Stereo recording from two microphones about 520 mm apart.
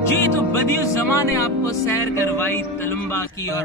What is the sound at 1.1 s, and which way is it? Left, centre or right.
Speech, centre.